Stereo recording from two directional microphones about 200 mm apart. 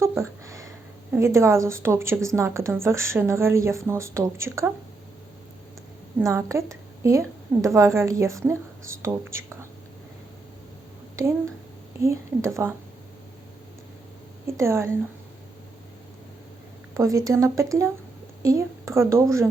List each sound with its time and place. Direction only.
0.0 s a woman's voice: 15° right (ahead or behind)
6.1 s a woman's voice: 15° right (ahead or behind)
11.9 s a woman's voice: 15° right (ahead or behind)
14.4 s a woman's voice: 15° right (ahead or behind)
17.0 s a woman's voice: 15° right (ahead or behind)